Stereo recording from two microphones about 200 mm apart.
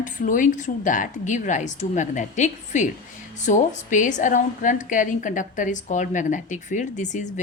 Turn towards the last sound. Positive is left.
turn(degrees=35)  # may be behind; listen again after turning